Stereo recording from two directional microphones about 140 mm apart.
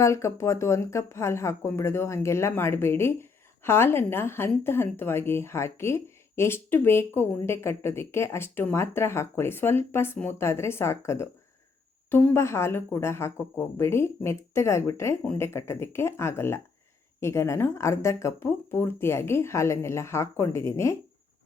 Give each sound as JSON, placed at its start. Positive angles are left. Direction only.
{"t": 0.0, "sound": "speech", "side_deg": 20}